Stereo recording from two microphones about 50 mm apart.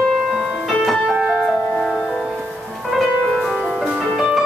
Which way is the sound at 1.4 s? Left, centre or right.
Centre.